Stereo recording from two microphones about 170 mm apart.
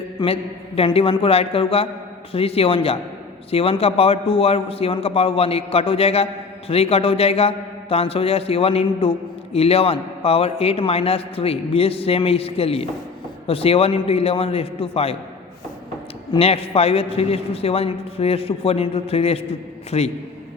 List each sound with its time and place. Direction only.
0.2 s a sound: 30° left (ahead or behind)
0.8 s a man's voice: 35° left (ahead or behind)
16.3 s a man's voice: 35° left (ahead or behind)